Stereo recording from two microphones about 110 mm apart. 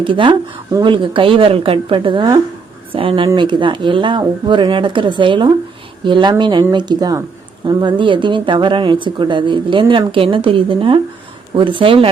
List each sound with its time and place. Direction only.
0.0 s speech: 50° right (ahead or behind)